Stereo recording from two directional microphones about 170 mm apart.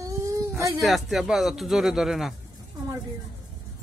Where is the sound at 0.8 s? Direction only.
Centre (ahead or behind).